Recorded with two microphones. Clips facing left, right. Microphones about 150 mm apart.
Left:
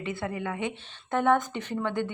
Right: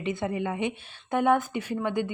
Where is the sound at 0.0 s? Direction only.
20° right (ahead or behind).